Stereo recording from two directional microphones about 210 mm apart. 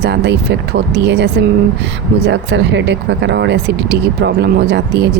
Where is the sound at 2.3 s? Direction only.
60° right (ahead or behind).